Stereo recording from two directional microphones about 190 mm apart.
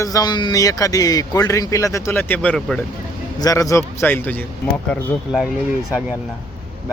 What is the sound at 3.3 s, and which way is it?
Speech, 20° left (ahead or behind).